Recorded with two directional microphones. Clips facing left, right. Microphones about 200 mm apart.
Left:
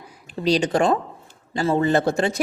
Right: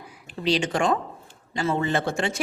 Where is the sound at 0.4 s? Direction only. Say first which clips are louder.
Left 4 dB; 40° left (ahead or behind).